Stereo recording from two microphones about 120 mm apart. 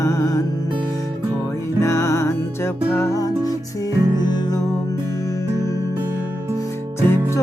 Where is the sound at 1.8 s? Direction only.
25° left (ahead or behind).